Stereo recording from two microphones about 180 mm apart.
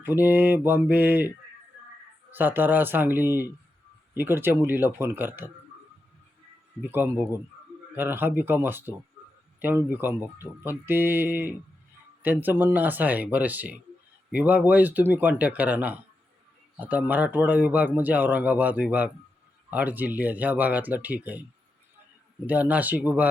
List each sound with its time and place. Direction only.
0.0 s speech: 10° right (ahead or behind)
2.3 s speech: 10° right (ahead or behind)
6.9 s speech: 10° right (ahead or behind)
22.4 s speech: 10° right (ahead or behind)